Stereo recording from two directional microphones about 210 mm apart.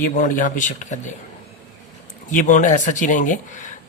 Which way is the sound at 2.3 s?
40° left (ahead or behind).